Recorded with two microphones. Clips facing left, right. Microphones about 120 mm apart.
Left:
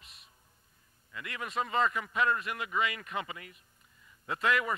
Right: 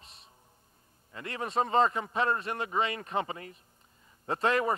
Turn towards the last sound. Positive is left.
turn(degrees=-35)  # may be behind; listen again after turning